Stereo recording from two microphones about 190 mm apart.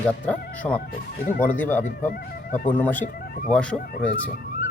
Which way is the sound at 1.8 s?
45° left (ahead or behind).